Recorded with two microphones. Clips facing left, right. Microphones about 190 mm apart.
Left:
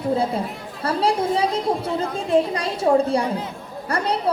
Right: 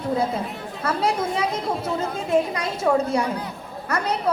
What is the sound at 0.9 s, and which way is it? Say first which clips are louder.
A woman's voice: left 3 dB; 30° left (ahead or behind).